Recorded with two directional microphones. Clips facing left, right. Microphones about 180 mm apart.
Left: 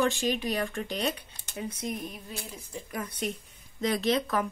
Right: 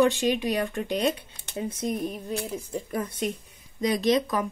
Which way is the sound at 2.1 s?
55° right (ahead or behind).